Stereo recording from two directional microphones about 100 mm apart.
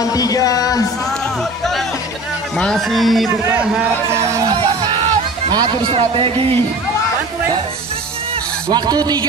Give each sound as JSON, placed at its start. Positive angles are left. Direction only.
{"t": 0.0, "sound": "speech", "side_deg": 40}
{"t": 2.5, "sound": "speech", "side_deg": 5}
{"t": 5.5, "sound": "a man's voice", "side_deg": -50}
{"t": 8.6, "sound": "a man's voice", "side_deg": -45}